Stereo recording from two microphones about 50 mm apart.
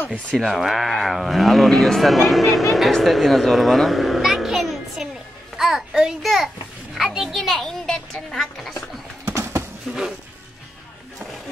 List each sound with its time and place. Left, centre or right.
0.4 s speech: centre
9.3 s horse: right
9.9 s music: centre